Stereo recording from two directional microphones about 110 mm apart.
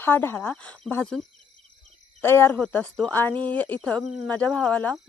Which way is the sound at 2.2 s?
20° left (ahead or behind).